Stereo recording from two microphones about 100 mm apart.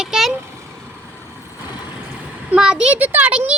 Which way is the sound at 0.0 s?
5° right (ahead or behind).